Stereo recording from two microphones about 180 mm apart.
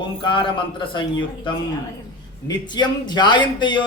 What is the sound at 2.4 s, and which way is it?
A man's voice, 25° left (ahead or behind).